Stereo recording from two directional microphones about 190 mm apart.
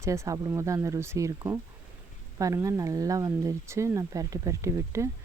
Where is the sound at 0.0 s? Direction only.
15° right (ahead or behind).